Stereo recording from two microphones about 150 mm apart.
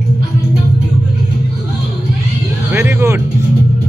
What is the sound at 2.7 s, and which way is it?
Music, 15° right (ahead or behind).